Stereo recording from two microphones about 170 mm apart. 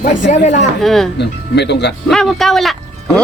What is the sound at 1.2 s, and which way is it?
Speech, 80° left.